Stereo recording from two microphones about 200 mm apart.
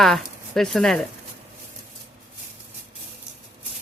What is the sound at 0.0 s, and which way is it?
Speech, centre (ahead or behind).